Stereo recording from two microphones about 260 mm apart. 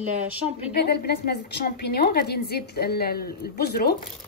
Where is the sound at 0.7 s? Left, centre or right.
Left.